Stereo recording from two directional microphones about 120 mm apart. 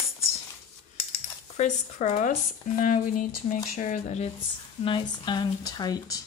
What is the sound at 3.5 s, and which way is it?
Speech, 85° left.